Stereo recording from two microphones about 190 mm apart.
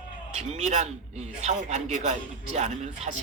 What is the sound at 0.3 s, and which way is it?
Speech, 35° right (ahead or behind).